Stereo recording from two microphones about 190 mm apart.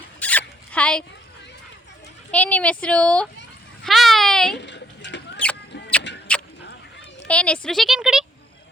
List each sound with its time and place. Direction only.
0.2 s zipper: 10° left (ahead or behind)
2.3 s speech: 5° left (ahead or behind)
3.8 s a sound: centre (ahead or behind)
4.5 s rodents: 70° left (ahead or behind)
6.3 s vehicle: 5° left (ahead or behind)
7.3 s speech: 5° left (ahead or behind)